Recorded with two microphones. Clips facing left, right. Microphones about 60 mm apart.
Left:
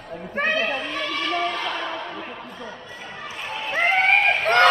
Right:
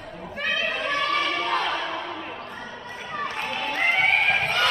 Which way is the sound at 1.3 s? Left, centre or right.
Centre.